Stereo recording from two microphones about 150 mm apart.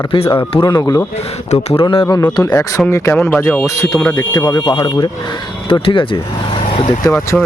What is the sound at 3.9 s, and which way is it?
Speech, centre (ahead or behind).